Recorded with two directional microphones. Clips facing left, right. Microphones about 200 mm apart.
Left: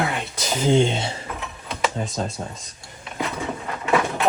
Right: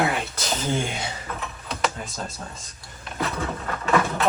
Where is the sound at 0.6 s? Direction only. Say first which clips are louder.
Left 10 dB; 25° left (ahead or behind).